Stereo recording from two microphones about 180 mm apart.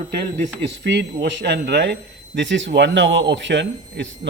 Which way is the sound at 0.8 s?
75° right (ahead or behind).